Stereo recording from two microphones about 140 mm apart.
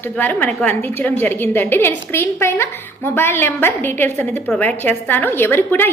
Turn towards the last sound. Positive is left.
turn(degrees=15)  # may be behind; listen again after turning